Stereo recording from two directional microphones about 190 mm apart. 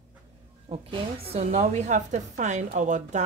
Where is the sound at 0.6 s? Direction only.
30° right (ahead or behind).